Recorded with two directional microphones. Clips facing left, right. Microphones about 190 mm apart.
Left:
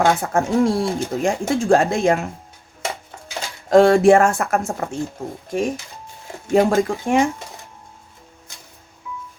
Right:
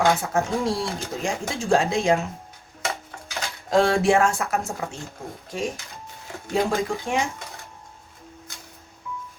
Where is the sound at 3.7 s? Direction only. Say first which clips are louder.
Left 7 dB; 55° left (ahead or behind).